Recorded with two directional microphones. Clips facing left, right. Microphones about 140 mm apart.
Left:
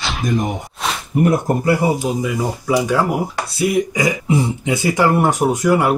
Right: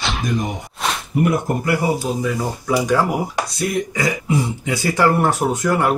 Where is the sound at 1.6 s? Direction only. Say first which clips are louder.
Left 3 dB; 20° left (ahead or behind).